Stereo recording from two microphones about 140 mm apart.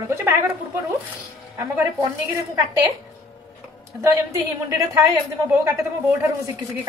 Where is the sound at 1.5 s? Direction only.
20° right (ahead or behind).